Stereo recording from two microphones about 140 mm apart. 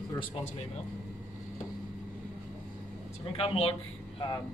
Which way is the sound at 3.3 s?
40° left (ahead or behind).